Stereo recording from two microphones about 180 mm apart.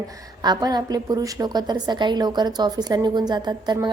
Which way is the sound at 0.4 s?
25° right (ahead or behind).